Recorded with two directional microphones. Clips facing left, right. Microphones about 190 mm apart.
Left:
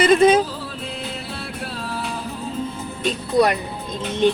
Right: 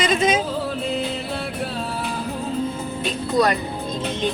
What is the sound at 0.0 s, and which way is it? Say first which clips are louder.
Music: left 6 dB; 55° left (ahead or behind).